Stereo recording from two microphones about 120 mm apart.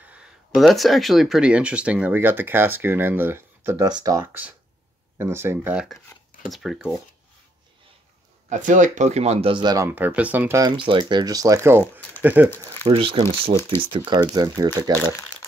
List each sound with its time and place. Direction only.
0.1 s speech: 5° right (ahead or behind); by 3.8 s 20° right (ahead or behind)
3.8 s speech: 30° right (ahead or behind)
4.2 s speech: 15° right (ahead or behind)
6.1 s dishes: 25° left (ahead or behind)
6.5 s speech: centre (ahead or behind)
8.5 s speech: 90° right; by 9.8 s 40° right (ahead or behind)
9.8 s speech: 15° right (ahead or behind)
10.8 s speech: 45° right (ahead or behind); by 12.4 s 15° right (ahead or behind)
12.8 s speech: 50° right (ahead or behind)
13.9 s speech: 35° right (ahead or behind)